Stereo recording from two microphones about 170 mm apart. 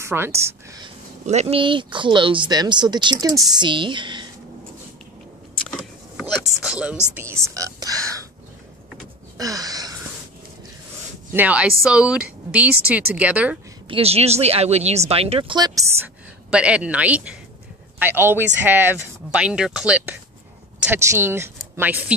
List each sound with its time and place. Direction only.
0.0 s speech: 15° right (ahead or behind)
1.2 s speech: 40° right (ahead or behind)
6.6 s speech: 5° right (ahead or behind)
9.4 s a sound: 20° right (ahead or behind)
11.3 s speech: 10° right (ahead or behind)
13.8 s speech: 35° right (ahead or behind)
16.4 s speech: 5° right (ahead or behind)